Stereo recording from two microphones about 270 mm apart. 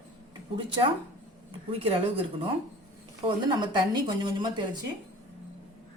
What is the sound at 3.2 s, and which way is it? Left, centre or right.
Speech, centre.